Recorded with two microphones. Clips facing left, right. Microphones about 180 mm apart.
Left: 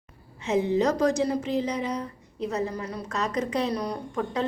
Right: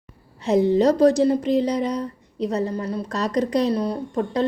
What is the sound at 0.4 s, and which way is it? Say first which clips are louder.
Speech: right 6 dB; 35° right (ahead or behind).